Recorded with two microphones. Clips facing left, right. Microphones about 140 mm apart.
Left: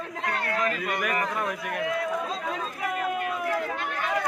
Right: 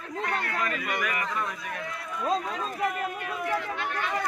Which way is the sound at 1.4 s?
65° left (ahead or behind).